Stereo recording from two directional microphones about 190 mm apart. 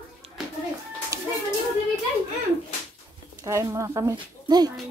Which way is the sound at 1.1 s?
15° right (ahead or behind).